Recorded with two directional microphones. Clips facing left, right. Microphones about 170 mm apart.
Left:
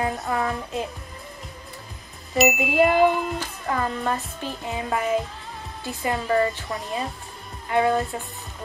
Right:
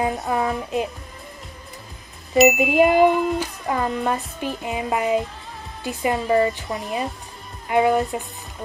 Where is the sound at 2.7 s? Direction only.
15° right (ahead or behind).